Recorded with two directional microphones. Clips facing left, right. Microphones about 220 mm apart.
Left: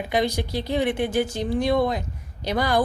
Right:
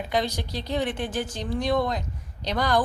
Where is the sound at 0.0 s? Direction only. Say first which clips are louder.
Left 3 dB; 10° left (ahead or behind).